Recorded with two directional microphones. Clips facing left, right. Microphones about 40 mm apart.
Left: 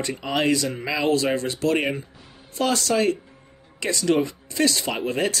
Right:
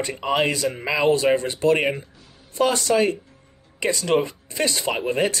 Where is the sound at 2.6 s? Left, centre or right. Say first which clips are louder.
Right 2 dB; right.